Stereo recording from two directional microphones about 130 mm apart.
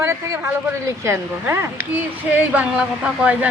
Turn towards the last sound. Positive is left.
turn(degrees=-10)  # may be behind; listen again after turning